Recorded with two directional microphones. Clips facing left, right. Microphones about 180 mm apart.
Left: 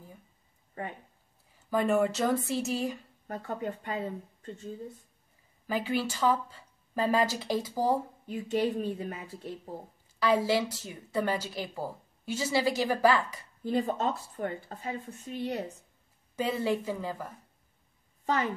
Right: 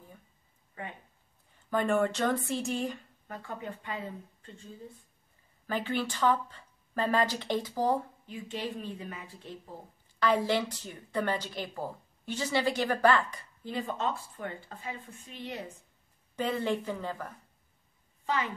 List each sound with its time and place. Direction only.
0.8 s a woman's voice: 45° left (ahead or behind)
1.7 s speech: 5° left (ahead or behind)
3.3 s a woman's voice: 40° left (ahead or behind)
5.7 s a woman's voice: 5° left (ahead or behind)
8.3 s a woman's voice: 45° left (ahead or behind)
10.1 s a woman's voice: 10° left (ahead or behind)
13.7 s a woman's voice: 40° left (ahead or behind)
16.3 s a woman's voice: 10° left (ahead or behind)
18.2 s a woman's voice: 40° left (ahead or behind)